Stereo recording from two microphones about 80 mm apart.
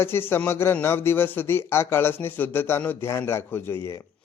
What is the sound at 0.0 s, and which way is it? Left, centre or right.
A man's voice, left.